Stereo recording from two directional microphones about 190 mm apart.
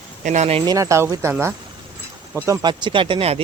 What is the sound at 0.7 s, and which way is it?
Speech, 15° right (ahead or behind).